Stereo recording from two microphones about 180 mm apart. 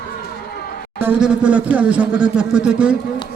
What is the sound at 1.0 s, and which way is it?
Speech, 5° right (ahead or behind).